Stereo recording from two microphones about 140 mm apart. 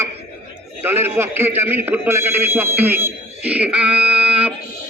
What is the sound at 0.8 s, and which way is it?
A man's voice, 15° right (ahead or behind).